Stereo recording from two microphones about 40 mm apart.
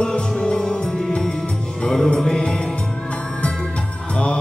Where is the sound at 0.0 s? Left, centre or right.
Centre.